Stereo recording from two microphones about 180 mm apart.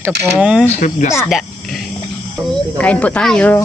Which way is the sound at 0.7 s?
45° left (ahead or behind).